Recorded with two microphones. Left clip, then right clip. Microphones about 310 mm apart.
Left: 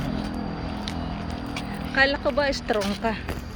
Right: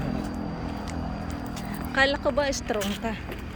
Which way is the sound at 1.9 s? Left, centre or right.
Centre.